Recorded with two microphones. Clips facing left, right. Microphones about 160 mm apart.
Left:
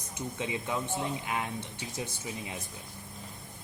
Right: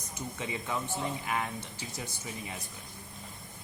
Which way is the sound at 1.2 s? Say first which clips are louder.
Even; 20° left (ahead or behind).